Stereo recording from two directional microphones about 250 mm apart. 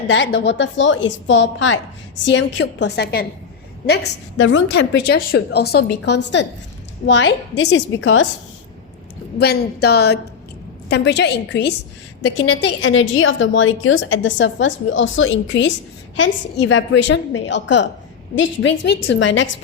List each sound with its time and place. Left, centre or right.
0.1 s a woman's voice: left
9.4 s a woman's voice: left